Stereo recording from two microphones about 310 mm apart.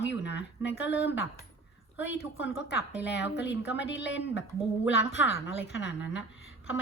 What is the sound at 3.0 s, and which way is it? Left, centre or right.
Speech, left.